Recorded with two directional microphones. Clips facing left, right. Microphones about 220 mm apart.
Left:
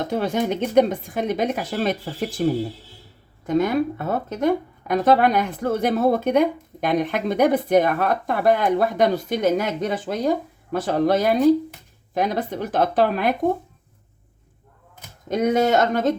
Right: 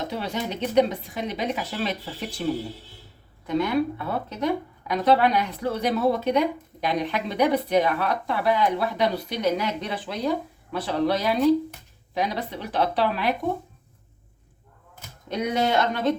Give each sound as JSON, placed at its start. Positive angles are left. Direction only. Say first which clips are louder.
{"t": 0.1, "sound": "speech", "louder": "left 7 dB", "side_deg": 50}
{"t": 3.4, "sound": "speech", "louder": "left 3 dB", "side_deg": 45}
{"t": 15.3, "sound": "speech", "louder": "left 5 dB", "side_deg": 45}